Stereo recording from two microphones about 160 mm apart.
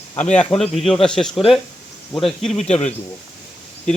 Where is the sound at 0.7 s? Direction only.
Centre (ahead or behind).